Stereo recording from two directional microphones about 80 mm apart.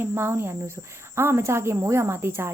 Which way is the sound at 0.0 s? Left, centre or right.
Right.